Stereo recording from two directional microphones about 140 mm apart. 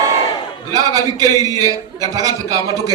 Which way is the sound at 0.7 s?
25° right (ahead or behind).